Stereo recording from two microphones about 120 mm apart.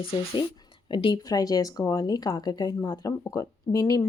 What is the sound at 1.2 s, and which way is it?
Speech, 30° left (ahead or behind).